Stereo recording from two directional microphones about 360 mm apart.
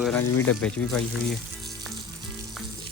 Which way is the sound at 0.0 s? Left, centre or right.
Centre.